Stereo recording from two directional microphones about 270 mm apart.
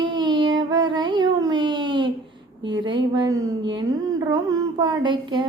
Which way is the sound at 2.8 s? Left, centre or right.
Centre.